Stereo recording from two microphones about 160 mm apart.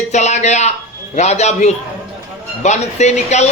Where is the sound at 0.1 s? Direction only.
45° left (ahead or behind).